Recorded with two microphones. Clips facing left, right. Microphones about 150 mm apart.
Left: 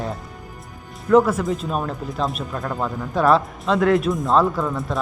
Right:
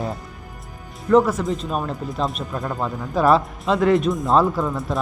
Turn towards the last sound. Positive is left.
turn(degrees=0)  # may be behind; listen again after turning